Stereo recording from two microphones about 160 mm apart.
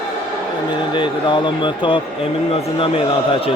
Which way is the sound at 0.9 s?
30° left (ahead or behind).